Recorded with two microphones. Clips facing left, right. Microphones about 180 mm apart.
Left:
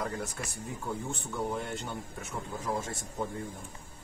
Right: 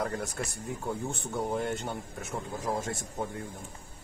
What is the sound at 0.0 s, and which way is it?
Speech, 50° right (ahead or behind).